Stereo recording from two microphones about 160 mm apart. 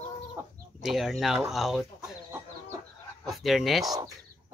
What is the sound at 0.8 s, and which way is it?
Speech, centre (ahead or behind).